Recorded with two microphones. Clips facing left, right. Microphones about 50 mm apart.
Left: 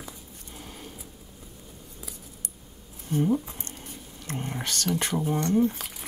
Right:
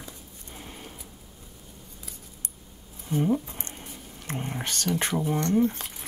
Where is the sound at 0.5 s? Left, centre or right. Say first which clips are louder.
Right 1 dB; right.